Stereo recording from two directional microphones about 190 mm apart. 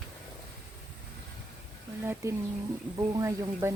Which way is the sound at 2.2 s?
15° right (ahead or behind).